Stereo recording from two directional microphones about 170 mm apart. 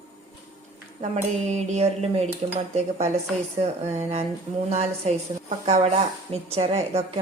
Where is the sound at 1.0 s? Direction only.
45° right (ahead or behind).